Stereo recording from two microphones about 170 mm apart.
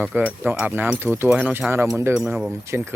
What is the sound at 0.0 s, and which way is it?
Speech, 10° right (ahead or behind).